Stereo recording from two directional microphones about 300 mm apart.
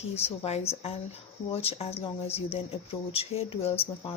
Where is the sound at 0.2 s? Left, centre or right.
Centre.